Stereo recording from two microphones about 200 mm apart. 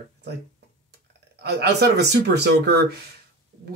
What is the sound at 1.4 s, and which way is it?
Speech, 55° right (ahead or behind).